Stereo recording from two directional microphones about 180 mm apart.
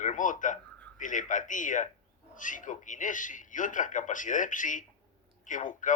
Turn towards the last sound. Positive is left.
turn(degrees=45)  # may be behind; listen again after turning